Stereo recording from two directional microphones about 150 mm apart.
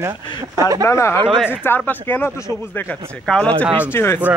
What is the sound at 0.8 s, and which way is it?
Speech, 20° left (ahead or behind).